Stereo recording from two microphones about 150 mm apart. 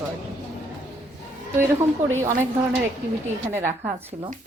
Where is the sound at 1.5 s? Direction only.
15° right (ahead or behind).